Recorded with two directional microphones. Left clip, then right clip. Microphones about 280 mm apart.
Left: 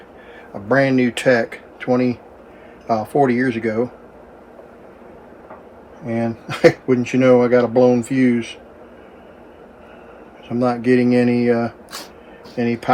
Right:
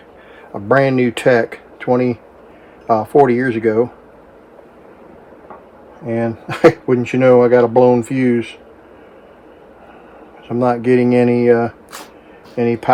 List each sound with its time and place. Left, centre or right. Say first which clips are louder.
0.7 s speech: right 3 dB; right
6.1 s speech: right 3 dB; right
10.5 s speech: right 3 dB; right